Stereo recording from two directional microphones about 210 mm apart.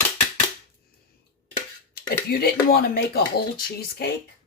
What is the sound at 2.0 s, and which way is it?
Speech, 45° left (ahead or behind).